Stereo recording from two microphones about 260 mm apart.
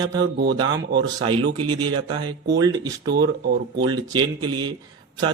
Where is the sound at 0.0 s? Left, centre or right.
Centre.